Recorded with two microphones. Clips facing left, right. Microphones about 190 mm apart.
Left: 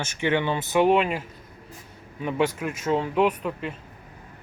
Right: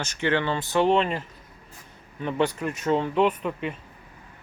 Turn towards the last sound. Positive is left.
turn(degrees=0)  # may be behind; listen again after turning